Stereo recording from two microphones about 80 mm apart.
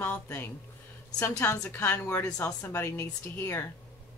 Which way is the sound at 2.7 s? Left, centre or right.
Left.